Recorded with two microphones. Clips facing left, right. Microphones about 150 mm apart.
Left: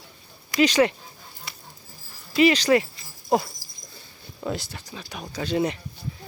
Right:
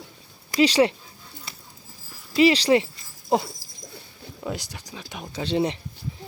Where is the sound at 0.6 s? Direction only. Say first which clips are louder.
Right 1 dB; 30° right (ahead or behind).